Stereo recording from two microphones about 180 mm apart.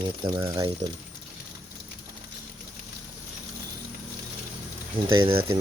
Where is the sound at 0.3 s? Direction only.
20° right (ahead or behind).